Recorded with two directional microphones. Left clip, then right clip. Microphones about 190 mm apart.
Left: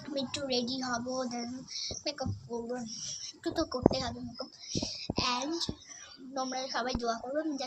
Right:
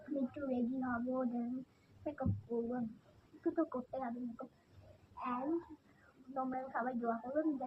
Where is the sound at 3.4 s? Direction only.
30° left (ahead or behind).